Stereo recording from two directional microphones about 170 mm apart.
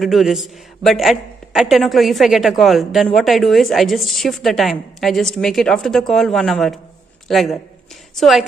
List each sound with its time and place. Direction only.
0.0 s a man's voice: centre (ahead or behind)